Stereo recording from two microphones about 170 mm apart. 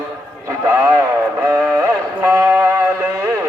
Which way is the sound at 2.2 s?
15° right (ahead or behind).